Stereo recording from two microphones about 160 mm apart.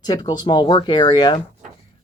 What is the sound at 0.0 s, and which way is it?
Speech, 25° left (ahead or behind).